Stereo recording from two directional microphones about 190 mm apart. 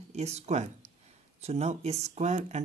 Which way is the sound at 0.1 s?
35° right (ahead or behind).